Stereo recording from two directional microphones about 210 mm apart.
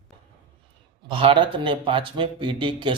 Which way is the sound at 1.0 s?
25° right (ahead or behind).